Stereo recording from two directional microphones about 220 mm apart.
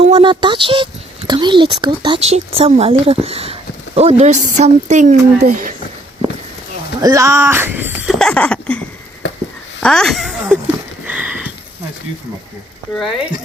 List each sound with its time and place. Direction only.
0.0 s speech: 25° right (ahead or behind)
7.0 s speech: 15° right (ahead or behind); by 8.8 s 5° left (ahead or behind)
9.8 s speech: 5° left (ahead or behind)
11.0 s a sound: 5° right (ahead or behind)
12.9 s speech: centre (ahead or behind)